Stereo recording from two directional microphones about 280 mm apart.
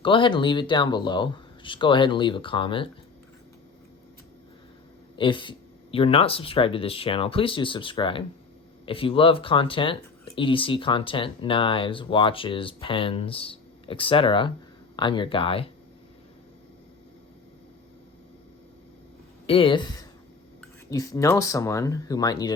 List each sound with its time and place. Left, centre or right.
0.0 s speech: centre
5.1 s speech: centre
19.5 s speech: centre